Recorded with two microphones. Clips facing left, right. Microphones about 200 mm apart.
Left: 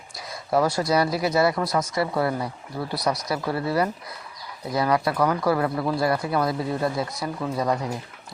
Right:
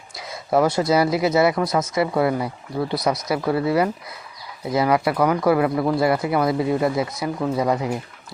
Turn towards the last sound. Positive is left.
turn(degrees=-20)  # may be behind; listen again after turning